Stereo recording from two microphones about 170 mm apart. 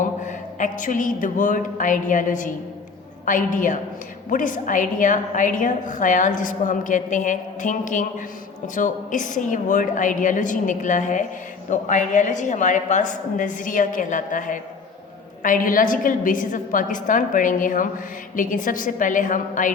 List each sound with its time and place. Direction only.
0.0 s a man's voice: 45° left (ahead or behind)